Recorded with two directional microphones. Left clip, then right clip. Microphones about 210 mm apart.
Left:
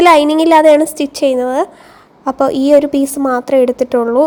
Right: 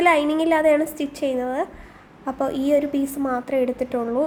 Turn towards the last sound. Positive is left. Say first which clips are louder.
# left 11 dB
turn(degrees=35)  # may be behind; listen again after turning